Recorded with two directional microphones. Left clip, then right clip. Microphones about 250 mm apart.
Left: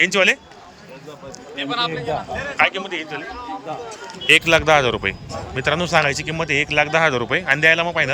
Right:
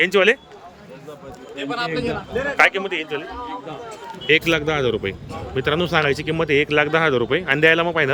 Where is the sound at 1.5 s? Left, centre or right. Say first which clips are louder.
Left 3 dB; right.